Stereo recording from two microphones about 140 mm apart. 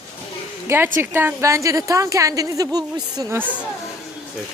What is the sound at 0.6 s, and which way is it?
A woman's voice, 15° right (ahead or behind).